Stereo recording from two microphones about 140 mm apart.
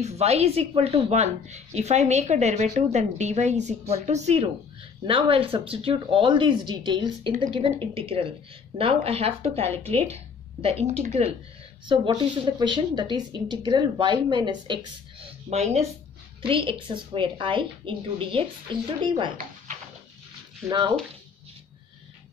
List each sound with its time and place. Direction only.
0.0 s a woman's voice: 50° right (ahead or behind)
5.0 s a woman's voice: 40° right (ahead or behind)
11.9 s a woman's voice: 35° right (ahead or behind)
15.5 s a woman's voice: 50° right (ahead or behind)
16.4 s a woman's voice: 40° right (ahead or behind)